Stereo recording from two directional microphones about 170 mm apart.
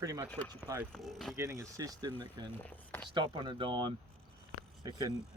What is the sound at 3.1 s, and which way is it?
Speech, 30° right (ahead or behind).